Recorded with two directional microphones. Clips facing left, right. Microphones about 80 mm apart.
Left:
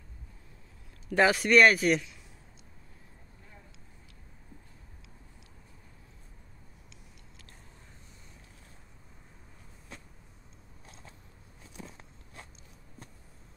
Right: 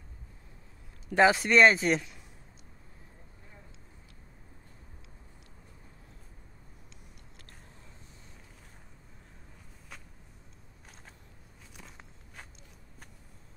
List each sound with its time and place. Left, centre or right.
1.0 s speech: right